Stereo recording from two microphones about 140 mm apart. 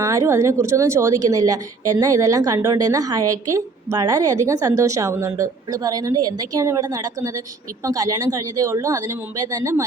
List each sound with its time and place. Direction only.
0.0 s a woman's voice: 20° right (ahead or behind)